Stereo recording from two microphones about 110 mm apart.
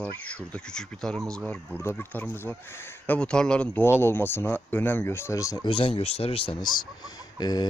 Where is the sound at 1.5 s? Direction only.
20° left (ahead or behind).